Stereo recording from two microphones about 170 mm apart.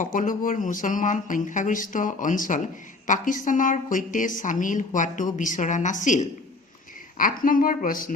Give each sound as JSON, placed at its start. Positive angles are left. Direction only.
{"t": 0.0, "sound": "a woman's voice", "side_deg": 50}